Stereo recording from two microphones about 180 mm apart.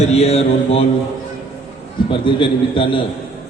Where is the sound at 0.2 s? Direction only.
35° left (ahead or behind).